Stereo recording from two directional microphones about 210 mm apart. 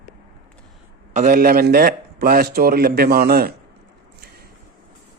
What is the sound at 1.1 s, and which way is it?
A man's voice, 40° right (ahead or behind).